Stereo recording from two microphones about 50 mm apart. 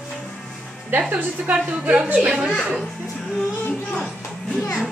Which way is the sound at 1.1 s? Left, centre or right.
Right.